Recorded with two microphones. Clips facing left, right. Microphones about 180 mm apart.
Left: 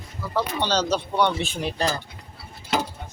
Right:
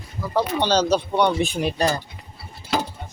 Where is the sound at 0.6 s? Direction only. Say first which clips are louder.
Right 5 dB; 10° right (ahead or behind).